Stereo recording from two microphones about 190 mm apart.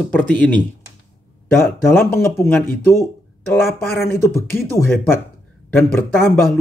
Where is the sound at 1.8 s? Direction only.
10° left (ahead or behind).